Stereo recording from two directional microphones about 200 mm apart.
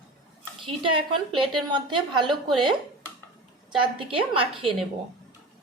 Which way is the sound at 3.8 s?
25° right (ahead or behind).